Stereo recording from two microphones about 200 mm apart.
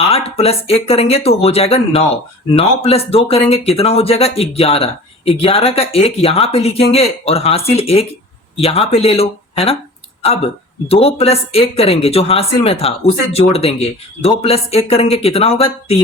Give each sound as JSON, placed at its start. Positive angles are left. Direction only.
{"t": 0.1, "sound": "speech", "side_deg": 30}